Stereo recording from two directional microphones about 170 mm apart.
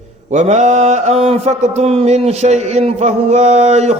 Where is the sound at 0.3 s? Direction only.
40° right (ahead or behind).